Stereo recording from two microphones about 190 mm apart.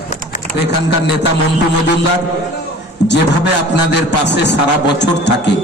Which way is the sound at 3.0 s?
65° left (ahead or behind).